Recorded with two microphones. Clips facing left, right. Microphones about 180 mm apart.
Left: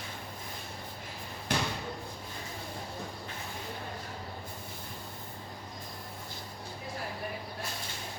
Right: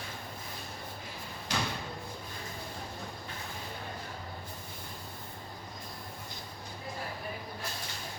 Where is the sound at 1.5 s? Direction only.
60° left (ahead or behind).